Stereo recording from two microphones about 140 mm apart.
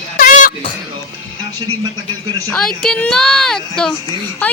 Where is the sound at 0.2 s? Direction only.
75° left (ahead or behind).